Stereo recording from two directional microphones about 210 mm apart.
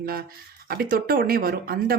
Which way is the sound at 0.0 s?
45° right (ahead or behind).